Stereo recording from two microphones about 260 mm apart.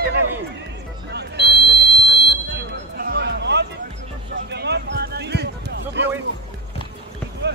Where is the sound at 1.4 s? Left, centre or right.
Left.